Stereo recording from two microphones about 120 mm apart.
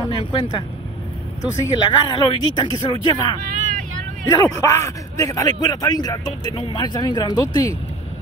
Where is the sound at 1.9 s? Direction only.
40° left (ahead or behind).